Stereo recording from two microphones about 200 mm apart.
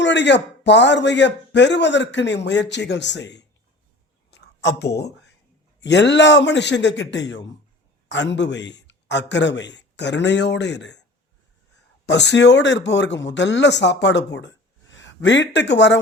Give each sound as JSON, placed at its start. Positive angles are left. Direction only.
{"t": 0.0, "sound": "a man's voice", "side_deg": 60}
{"t": 4.3, "sound": "a sound", "side_deg": 55}
{"t": 5.8, "sound": "a man's voice", "side_deg": 60}
{"t": 12.0, "sound": "a man's voice", "side_deg": 60}